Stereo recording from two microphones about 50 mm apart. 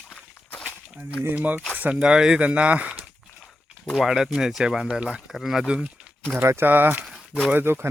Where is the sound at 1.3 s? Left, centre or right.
Right.